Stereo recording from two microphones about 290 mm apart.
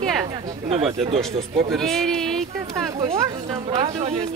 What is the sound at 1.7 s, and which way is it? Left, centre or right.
Speech, centre.